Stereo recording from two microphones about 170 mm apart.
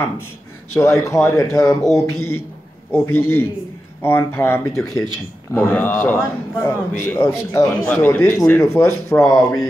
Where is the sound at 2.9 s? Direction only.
15° left (ahead or behind).